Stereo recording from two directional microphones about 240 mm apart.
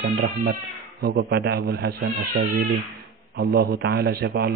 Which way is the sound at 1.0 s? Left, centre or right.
Right.